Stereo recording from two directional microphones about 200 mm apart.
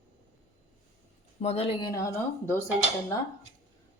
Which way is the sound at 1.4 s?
30° left (ahead or behind).